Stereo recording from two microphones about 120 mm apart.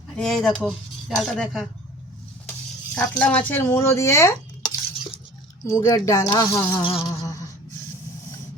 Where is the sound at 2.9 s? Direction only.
10° left (ahead or behind); by 6.8 s 30° left (ahead or behind).